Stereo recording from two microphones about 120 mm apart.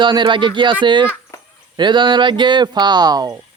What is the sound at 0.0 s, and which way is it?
Speech, 40° right (ahead or behind).